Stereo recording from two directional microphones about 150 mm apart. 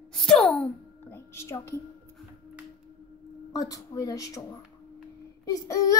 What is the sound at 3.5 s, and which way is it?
Child singing, 25° left (ahead or behind).